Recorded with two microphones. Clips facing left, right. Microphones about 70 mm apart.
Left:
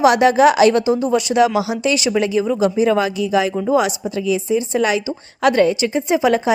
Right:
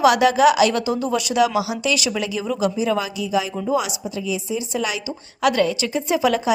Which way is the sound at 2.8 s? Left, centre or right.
Left.